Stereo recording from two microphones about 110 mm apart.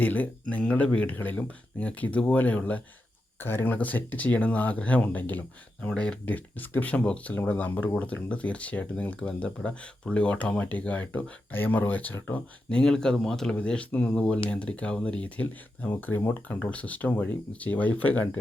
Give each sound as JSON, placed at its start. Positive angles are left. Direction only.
{"t": 0.0, "sound": "speech", "side_deg": 15}